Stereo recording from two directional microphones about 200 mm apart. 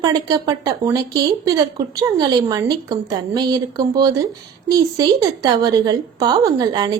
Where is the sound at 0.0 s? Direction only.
20° right (ahead or behind).